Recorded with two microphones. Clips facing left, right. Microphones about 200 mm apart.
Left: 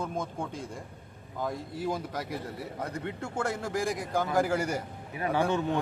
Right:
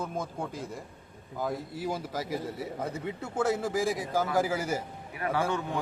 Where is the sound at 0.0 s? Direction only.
5° right (ahead or behind).